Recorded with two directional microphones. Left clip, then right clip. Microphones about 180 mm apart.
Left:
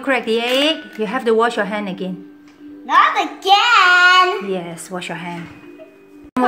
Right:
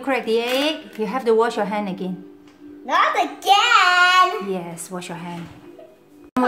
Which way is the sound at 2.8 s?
30° right (ahead or behind).